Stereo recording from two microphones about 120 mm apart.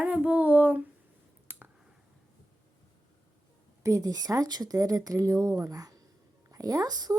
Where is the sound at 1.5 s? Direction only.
15° right (ahead or behind).